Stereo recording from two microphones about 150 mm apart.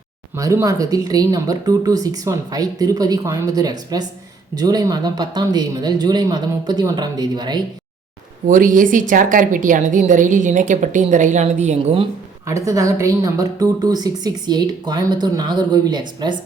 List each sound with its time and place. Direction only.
0.3 s a woman's voice: 20° right (ahead or behind)
8.4 s a woman's voice: 60° right (ahead or behind)
12.6 s a woman's voice: 20° right (ahead or behind)